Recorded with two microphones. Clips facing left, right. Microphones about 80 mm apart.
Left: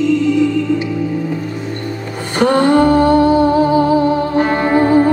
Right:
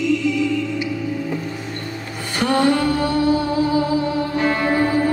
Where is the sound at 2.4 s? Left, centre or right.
Left.